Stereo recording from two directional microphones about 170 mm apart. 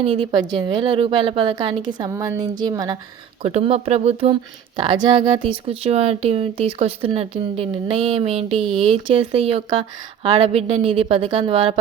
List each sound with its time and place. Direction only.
0.0 s a woman's voice: 30° right (ahead or behind)
3.4 s speech: 35° right (ahead or behind)